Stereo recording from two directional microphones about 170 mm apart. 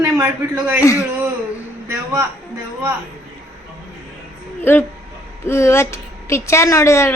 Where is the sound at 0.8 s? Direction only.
15° left (ahead or behind).